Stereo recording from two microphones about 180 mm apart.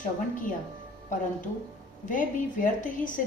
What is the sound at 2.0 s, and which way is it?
A woman's voice, 45° left (ahead or behind).